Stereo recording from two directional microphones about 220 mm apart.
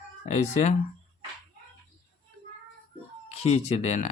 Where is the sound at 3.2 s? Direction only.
30° left (ahead or behind).